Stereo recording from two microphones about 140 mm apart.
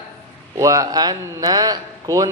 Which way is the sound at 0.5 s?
25° right (ahead or behind).